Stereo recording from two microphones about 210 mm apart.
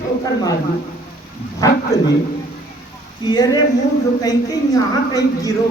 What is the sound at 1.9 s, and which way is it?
Speech, 15° left (ahead or behind).